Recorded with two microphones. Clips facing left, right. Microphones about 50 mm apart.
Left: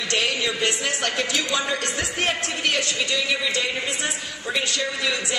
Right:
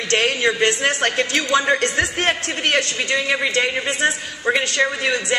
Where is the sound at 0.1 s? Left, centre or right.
Right.